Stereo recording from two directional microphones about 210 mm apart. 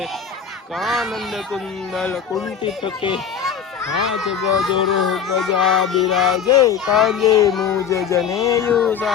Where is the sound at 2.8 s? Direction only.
20° left (ahead or behind).